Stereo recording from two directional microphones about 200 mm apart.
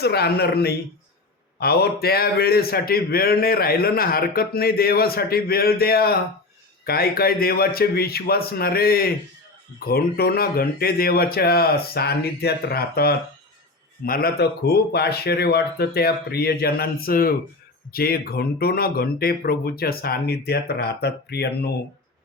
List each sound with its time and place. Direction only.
0.0 s a man's voice: 55° left (ahead or behind)